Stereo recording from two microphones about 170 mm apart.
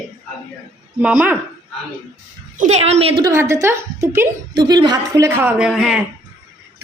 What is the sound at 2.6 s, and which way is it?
Speech, 40° right (ahead or behind).